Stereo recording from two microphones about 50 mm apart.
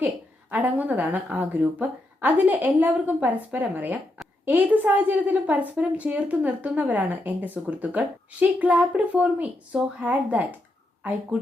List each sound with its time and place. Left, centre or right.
0.5 s a woman's voice: right